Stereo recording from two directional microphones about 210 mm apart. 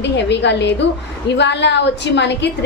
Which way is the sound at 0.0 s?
55° left (ahead or behind).